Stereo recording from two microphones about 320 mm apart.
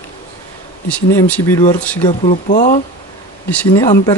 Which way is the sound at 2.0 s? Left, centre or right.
Left.